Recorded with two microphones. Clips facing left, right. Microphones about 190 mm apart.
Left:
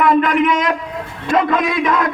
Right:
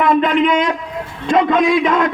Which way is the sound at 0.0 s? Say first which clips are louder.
Even; 25° right (ahead or behind).